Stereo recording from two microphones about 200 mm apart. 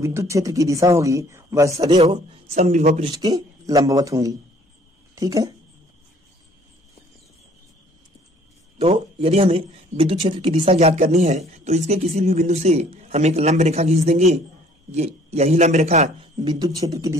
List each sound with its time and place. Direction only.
0.0 s a man's voice: 15° right (ahead or behind)
2.0 s a man's voice: 30° right (ahead or behind)
8.7 s speech: 30° right (ahead or behind)
16.4 s a man's voice: 20° right (ahead or behind)